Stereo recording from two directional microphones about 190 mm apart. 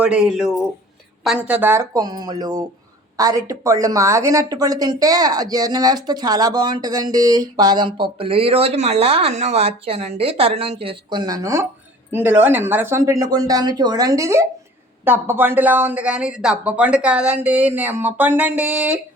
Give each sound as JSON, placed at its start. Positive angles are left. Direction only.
{"t": 0.0, "sound": "a woman's voice", "side_deg": -5}